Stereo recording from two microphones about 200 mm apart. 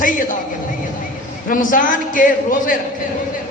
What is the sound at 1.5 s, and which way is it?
A man's voice, 40° left (ahead or behind).